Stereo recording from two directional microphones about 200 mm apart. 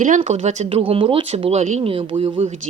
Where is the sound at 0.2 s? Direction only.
30° right (ahead or behind).